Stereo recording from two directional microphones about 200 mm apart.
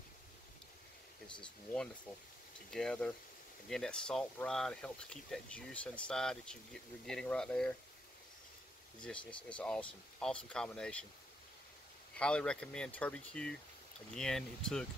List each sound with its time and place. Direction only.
1.4 s speech: 5° left (ahead or behind)
9.0 s speech: 5° left (ahead or behind)
12.2 s speech: 5° left (ahead or behind)